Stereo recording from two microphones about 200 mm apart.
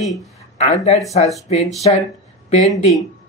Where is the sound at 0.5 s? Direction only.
35° left (ahead or behind).